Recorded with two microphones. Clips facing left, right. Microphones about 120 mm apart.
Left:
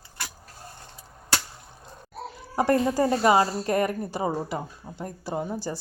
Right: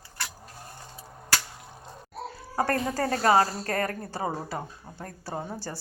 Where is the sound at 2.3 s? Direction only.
15° left (ahead or behind).